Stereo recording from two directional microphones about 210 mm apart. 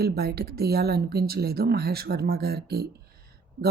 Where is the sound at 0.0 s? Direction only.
50° right (ahead or behind).